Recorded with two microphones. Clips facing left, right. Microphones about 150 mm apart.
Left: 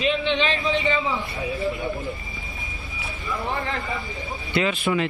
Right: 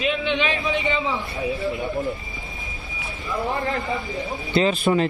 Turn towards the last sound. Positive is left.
turn(degrees=-35)  # may be behind; listen again after turning